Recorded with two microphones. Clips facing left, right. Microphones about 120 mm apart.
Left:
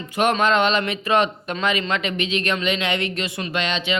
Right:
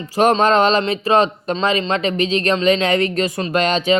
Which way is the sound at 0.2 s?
35° right (ahead or behind).